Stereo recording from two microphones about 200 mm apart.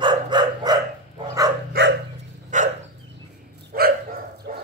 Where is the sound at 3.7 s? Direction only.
50° right (ahead or behind).